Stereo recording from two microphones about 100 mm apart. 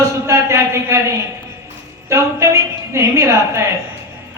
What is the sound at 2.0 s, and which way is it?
A woman's voice, 30° right (ahead or behind).